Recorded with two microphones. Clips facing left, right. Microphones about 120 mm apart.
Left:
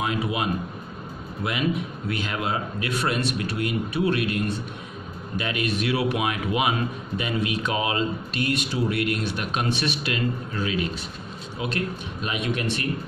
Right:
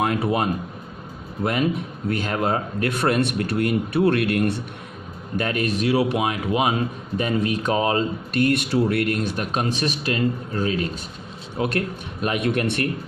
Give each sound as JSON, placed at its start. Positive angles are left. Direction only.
{"t": 0.0, "sound": "speech", "side_deg": -55}
{"t": 5.3, "sound": "a man's voice", "side_deg": -45}
{"t": 8.3, "sound": "speech", "side_deg": -55}
{"t": 11.5, "sound": "speech", "side_deg": -55}